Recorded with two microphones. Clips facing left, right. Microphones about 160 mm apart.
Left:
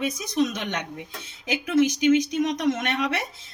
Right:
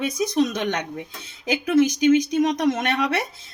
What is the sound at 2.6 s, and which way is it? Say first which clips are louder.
Speech: right 3 dB; 35° right (ahead or behind).